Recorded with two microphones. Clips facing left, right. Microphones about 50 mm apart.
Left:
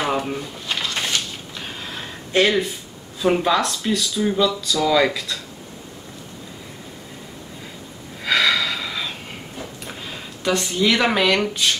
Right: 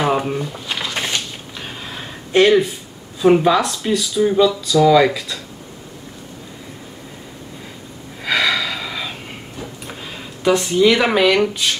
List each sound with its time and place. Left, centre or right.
0.0 s a sound: centre
8.2 s snort: centre
10.0 s speech: centre